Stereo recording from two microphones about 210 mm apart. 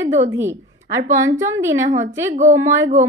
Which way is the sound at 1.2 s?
15° right (ahead or behind).